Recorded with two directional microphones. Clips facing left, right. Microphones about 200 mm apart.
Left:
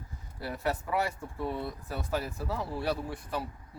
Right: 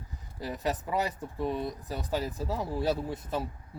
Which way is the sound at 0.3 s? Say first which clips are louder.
Right 1 dB; 15° right (ahead or behind).